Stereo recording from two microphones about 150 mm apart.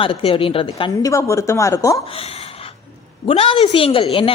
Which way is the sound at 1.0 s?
20° left (ahead or behind).